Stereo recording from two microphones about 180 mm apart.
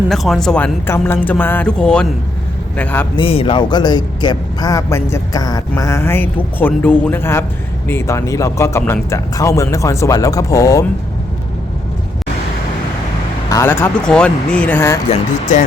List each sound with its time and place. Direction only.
0.1 s speech: centre (ahead or behind)
3.2 s speech: 30° left (ahead or behind)
13.5 s speech: 15° left (ahead or behind)